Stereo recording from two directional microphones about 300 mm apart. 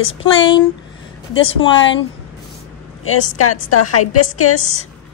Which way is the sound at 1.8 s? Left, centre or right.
Left.